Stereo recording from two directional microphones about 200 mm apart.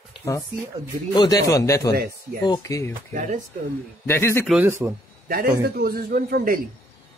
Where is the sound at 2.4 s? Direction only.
20° left (ahead or behind).